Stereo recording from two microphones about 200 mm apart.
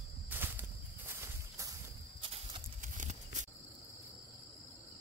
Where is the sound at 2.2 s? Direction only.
25° right (ahead or behind).